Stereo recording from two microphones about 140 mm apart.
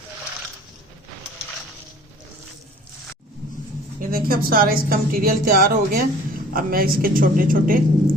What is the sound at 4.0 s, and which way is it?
A woman's voice, 90° right.